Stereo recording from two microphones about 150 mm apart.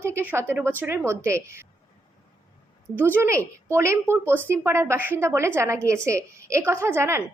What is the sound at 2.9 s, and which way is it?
A woman's voice, 15° right (ahead or behind).